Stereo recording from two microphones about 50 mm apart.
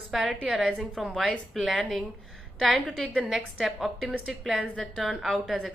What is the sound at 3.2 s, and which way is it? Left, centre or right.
A woman's voice, centre.